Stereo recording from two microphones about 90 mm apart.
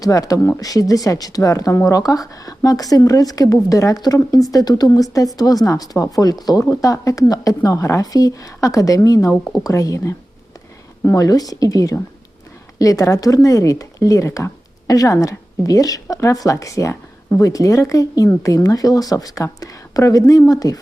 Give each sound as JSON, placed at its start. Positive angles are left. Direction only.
{"t": 0.0, "sound": "a woman's voice", "side_deg": 40}